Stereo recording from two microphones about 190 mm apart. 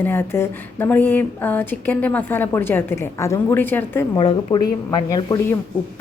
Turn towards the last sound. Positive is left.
turn(degrees=20)  # may be behind; listen again after turning